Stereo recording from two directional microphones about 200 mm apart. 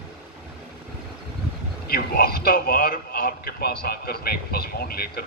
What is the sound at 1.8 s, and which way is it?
A man's voice, 50° left (ahead or behind).